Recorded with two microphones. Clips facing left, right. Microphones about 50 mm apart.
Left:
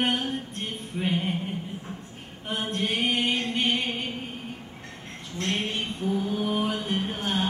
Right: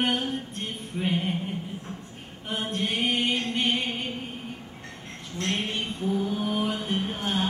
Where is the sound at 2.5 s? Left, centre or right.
Centre.